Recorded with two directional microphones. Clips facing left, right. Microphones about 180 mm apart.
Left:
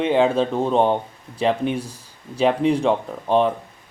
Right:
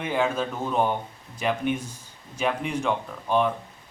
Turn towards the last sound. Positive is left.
turn(degrees=30)  # may be behind; listen again after turning